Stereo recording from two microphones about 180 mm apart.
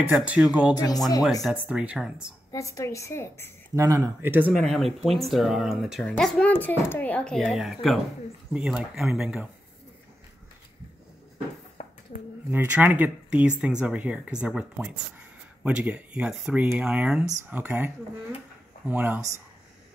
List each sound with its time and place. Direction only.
0.0 s speech: 10° right (ahead or behind)
0.7 s speech: 20° left (ahead or behind)
1.4 s speech: 5° right (ahead or behind)
2.5 s a woman's voice: 15° left (ahead or behind)
3.7 s speech: 20° right (ahead or behind)
4.6 s speech: centre (ahead or behind)
12.4 s speech: 10° right (ahead or behind)